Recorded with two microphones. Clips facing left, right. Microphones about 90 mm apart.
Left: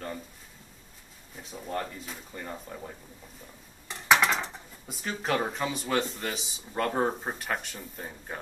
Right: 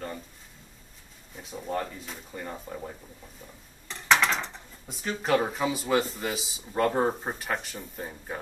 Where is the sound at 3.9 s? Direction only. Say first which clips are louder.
Even; 5° left (ahead or behind).